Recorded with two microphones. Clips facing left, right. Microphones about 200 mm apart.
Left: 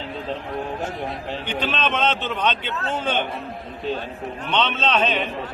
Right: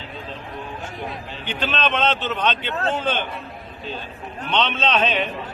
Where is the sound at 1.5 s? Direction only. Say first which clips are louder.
Right 1 dB; 10° left (ahead or behind).